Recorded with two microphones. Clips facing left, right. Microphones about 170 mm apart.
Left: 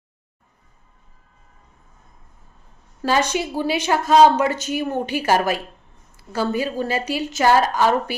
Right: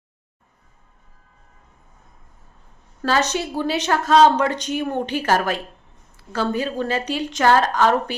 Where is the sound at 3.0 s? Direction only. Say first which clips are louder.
Left 1 dB; 10° left (ahead or behind).